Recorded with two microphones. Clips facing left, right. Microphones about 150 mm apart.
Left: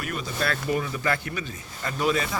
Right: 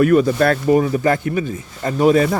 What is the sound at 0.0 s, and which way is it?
Speech, 55° right (ahead or behind).